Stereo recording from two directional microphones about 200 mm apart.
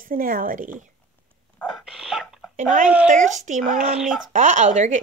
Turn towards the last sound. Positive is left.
turn(degrees=-40)  # may be behind; listen again after turning